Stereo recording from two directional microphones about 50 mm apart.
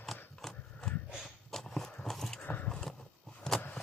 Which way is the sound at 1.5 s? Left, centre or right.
Centre.